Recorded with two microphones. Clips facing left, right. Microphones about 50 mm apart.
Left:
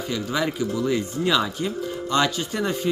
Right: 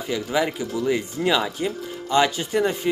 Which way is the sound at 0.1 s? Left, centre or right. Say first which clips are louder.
Right 3 dB; centre.